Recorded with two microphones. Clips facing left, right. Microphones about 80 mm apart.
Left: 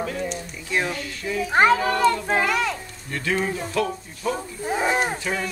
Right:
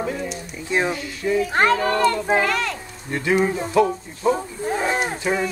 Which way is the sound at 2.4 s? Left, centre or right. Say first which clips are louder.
Even; centre.